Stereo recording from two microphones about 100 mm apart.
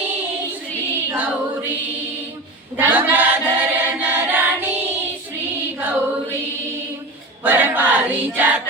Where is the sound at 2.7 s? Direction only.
20° right (ahead or behind).